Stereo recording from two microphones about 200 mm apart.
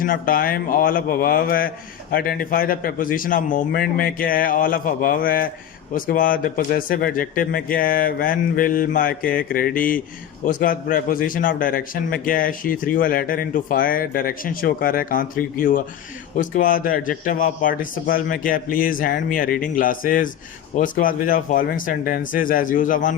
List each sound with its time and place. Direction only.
0.0 s a man's voice: 45° left (ahead or behind)